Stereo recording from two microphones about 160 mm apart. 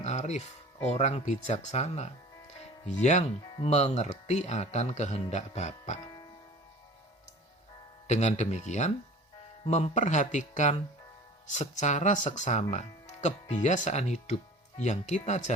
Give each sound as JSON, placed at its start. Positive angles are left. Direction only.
{"t": 0.0, "sound": "music", "side_deg": 45}
{"t": 0.9, "sound": "speech", "side_deg": 40}
{"t": 8.0, "sound": "speech", "side_deg": 45}